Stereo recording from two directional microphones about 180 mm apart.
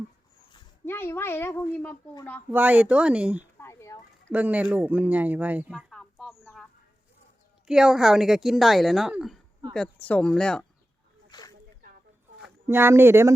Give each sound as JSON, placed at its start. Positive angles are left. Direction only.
{"t": 0.9, "sound": "speech", "side_deg": 15}
{"t": 2.5, "sound": "speech", "side_deg": -10}
{"t": 3.6, "sound": "speech", "side_deg": 15}
{"t": 4.3, "sound": "speech", "side_deg": -10}
{"t": 5.9, "sound": "a sound", "side_deg": 0}
{"t": 7.7, "sound": "a woman's voice", "side_deg": -5}
{"t": 11.3, "sound": "a sound", "side_deg": 20}
{"t": 12.6, "sound": "speech", "side_deg": -15}